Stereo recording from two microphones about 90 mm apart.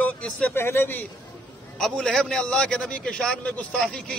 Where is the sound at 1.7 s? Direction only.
5° left (ahead or behind).